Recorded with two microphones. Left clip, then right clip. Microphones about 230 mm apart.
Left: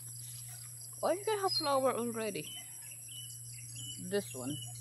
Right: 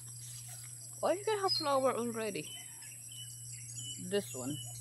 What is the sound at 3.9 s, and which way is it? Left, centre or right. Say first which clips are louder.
Speech: even; centre.